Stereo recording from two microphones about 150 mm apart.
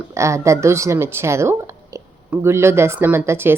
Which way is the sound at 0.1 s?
20° right (ahead or behind).